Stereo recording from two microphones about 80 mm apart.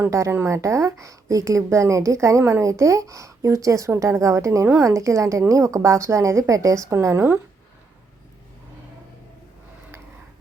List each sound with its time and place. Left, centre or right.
0.1 s a woman's voice: right